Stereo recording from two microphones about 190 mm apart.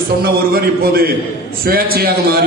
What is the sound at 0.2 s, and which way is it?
A man's voice, 55° right (ahead or behind).